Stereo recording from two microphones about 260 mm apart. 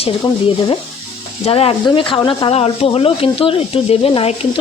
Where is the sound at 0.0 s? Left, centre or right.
Left.